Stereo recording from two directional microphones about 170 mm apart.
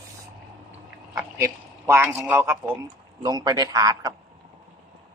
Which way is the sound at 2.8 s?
25° right (ahead or behind).